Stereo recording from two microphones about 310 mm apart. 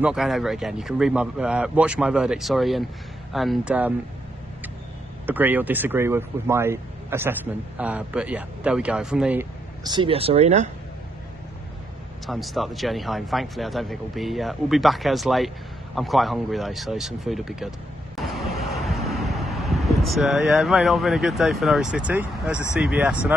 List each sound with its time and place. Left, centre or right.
0.0 s a man's voice: centre
5.2 s speech: centre; by 10.7 s right
12.3 s a man's voice: centre